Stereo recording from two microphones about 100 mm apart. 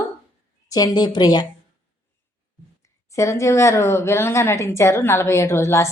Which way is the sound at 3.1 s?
30° left (ahead or behind).